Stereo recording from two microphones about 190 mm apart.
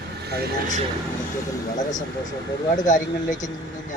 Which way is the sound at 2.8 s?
40° left (ahead or behind).